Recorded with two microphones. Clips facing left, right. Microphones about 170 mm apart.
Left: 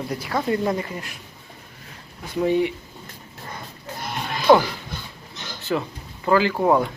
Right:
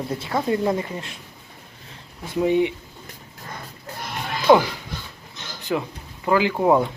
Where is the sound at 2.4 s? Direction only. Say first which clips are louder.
Right 1 dB; 20° right (ahead or behind).